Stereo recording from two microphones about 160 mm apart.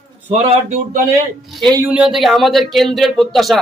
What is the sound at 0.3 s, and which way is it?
Speech, 40° right (ahead or behind).